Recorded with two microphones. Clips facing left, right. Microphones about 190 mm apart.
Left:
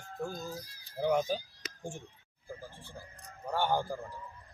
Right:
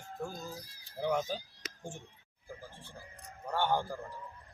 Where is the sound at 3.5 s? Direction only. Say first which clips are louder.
Left 1 dB; 5° left (ahead or behind).